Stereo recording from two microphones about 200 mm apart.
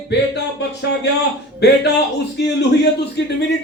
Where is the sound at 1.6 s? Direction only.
60° left (ahead or behind).